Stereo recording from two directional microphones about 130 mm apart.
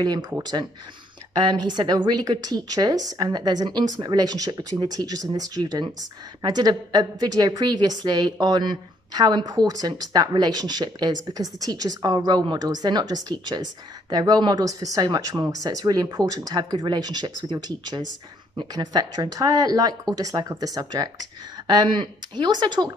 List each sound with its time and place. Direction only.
0.0 s a woman's voice: 35° right (ahead or behind)